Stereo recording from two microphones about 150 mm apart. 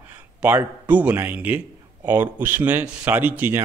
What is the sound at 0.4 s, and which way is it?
Speech, 10° right (ahead or behind).